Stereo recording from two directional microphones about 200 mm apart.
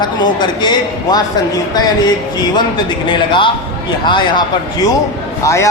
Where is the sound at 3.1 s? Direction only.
25° left (ahead or behind).